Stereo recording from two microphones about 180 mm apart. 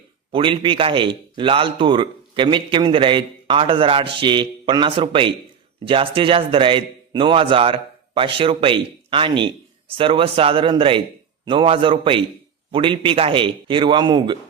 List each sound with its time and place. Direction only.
0.3 s a man's voice: 30° right (ahead or behind)